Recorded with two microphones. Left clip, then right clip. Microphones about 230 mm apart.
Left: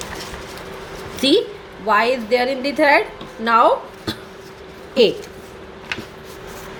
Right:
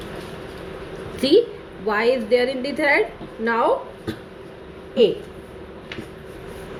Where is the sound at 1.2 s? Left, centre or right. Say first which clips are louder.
Even; centre.